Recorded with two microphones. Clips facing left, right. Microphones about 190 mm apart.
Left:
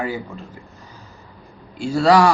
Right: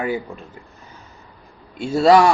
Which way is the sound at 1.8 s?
20° right (ahead or behind).